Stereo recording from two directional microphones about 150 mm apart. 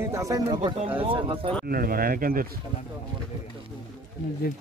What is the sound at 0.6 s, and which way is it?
Speech, 35° right (ahead or behind).